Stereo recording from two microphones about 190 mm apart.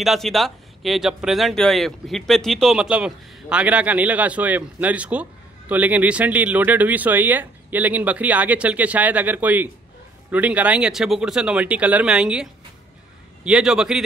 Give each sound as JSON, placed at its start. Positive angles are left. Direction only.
{"t": 0.0, "sound": "speech", "side_deg": 0}